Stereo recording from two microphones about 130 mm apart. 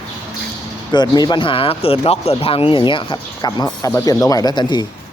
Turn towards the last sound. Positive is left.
turn(degrees=35)  # may be behind; listen again after turning